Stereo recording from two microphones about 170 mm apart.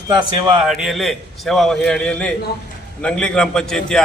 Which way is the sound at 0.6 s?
Centre (ahead or behind).